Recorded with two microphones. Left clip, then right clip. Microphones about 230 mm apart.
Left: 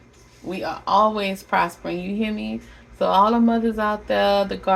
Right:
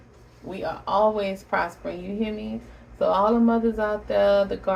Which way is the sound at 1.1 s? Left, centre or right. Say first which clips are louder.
Left 4 dB; left.